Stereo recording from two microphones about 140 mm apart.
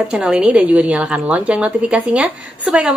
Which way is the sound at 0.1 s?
5° right (ahead or behind).